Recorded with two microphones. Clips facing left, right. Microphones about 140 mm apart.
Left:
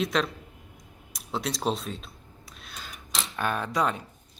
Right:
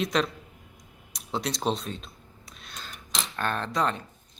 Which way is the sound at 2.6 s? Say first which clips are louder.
Even; 5° left (ahead or behind).